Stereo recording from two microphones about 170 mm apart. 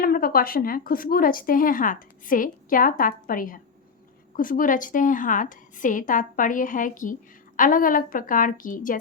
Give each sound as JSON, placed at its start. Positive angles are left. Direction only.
{"t": 0.0, "sound": "a woman's voice", "side_deg": 60}